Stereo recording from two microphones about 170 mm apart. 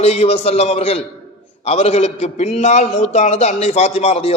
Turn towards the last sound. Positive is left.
turn(degrees=40)  # may be behind; listen again after turning